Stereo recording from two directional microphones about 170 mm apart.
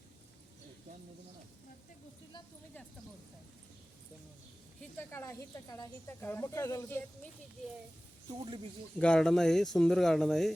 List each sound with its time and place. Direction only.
4.8 s speech: 15° left (ahead or behind)
8.3 s a man's voice: 30° right (ahead or behind)
9.0 s speech: 5° left (ahead or behind)